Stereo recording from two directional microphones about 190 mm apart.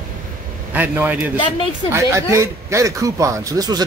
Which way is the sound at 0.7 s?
10° right (ahead or behind).